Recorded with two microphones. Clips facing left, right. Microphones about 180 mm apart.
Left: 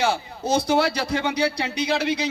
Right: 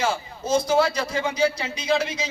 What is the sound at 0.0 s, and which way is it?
A man's voice, 70° left (ahead or behind).